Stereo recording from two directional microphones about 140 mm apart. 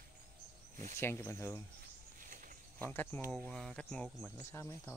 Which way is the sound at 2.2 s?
75° right (ahead or behind).